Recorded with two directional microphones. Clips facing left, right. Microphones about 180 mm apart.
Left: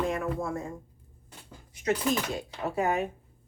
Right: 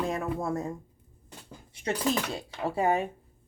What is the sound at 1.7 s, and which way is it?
Speech, 30° right (ahead or behind).